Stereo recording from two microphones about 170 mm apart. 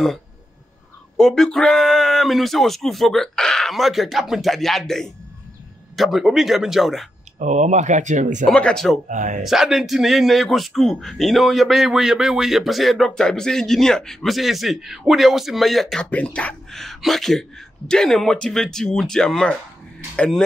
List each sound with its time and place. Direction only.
1.1 s a man's voice: 5° left (ahead or behind)
7.3 s speech: 45° right (ahead or behind)
8.5 s a man's voice: 5° left (ahead or behind)
9.1 s speech: 45° right (ahead or behind)
9.4 s a man's voice: centre (ahead or behind)